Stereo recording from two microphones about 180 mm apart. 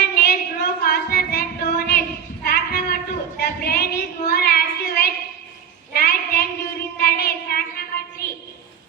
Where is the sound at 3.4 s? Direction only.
60° left (ahead or behind).